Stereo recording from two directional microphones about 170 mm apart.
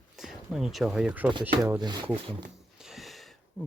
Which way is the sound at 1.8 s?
25° right (ahead or behind).